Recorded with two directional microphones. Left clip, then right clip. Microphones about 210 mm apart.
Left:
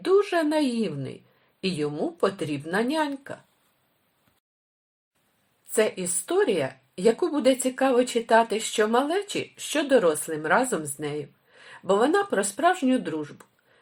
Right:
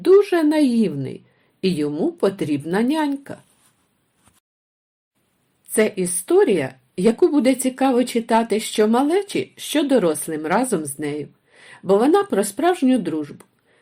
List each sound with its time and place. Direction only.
0.0 s speech: 30° right (ahead or behind)
5.7 s speech: 30° right (ahead or behind)